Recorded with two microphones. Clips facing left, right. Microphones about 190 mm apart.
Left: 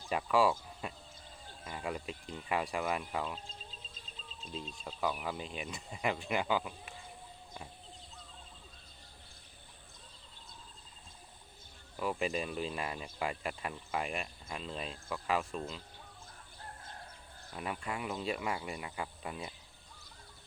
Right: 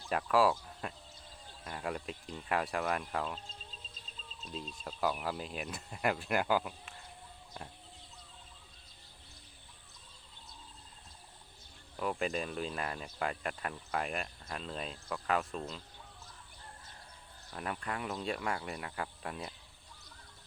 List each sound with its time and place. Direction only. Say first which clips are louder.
0.1 s speech: right 1 dB; centre (ahead or behind)
4.4 s speech: even; centre (ahead or behind)
11.9 s speech: even; 5° left (ahead or behind)
17.5 s speech: even; 5° left (ahead or behind)